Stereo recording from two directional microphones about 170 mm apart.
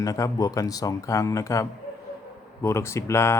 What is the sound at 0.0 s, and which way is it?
A man's voice, 20° left (ahead or behind).